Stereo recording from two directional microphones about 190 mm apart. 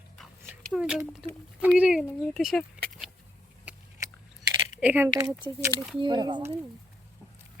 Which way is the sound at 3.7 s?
5° right (ahead or behind).